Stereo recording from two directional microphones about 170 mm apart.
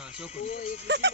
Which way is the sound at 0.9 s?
90° right.